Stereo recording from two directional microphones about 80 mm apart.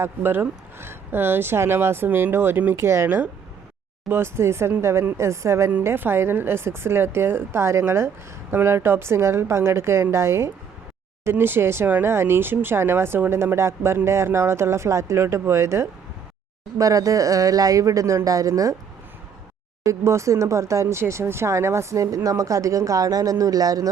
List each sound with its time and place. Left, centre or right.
0.0 s a woman's voice: right
19.8 s a woman's voice: right